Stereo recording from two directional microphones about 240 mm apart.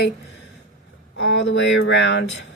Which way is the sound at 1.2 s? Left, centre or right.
Left.